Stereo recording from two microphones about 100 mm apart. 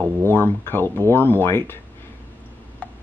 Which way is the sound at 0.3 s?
20° left (ahead or behind).